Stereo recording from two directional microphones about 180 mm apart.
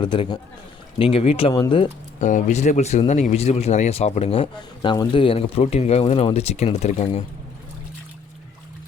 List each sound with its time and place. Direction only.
0.0 s speech: 25° left (ahead or behind)
2.2 s speech: 40° left (ahead or behind)